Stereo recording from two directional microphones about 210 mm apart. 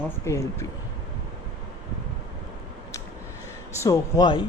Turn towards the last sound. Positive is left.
turn(degrees=20)  # may be behind; listen again after turning